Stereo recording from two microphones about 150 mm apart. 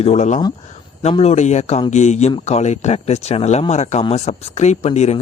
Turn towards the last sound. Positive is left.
turn(degrees=45)  # may be behind; listen again after turning